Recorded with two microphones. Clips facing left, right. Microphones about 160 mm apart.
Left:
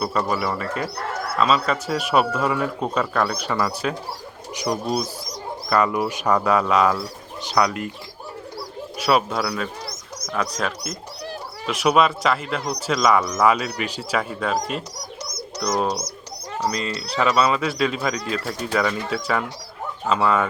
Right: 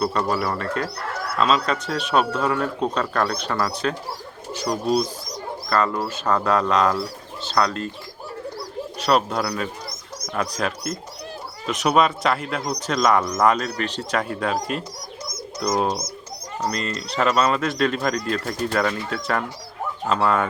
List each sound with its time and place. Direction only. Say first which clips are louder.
0.0 s speech: right 1 dB; 5° left (ahead or behind)
9.0 s speech: even; 5° left (ahead or behind)
15.4 s bird: right 1 dB; 75° left (ahead or behind)
16.7 s speech: even; centre (ahead or behind)